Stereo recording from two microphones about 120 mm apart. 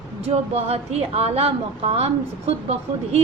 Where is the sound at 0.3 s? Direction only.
60° right (ahead or behind).